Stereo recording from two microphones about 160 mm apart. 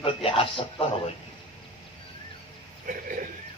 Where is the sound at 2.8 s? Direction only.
60° right (ahead or behind).